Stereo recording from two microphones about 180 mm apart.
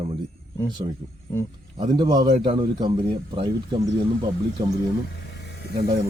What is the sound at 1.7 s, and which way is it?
Speech, 25° right (ahead or behind).